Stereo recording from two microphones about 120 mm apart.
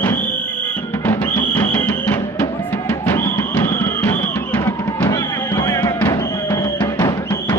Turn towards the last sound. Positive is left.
turn(degrees=30)  # may be behind; listen again after turning